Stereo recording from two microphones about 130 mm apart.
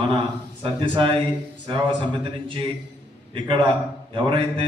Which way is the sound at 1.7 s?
40° right (ahead or behind).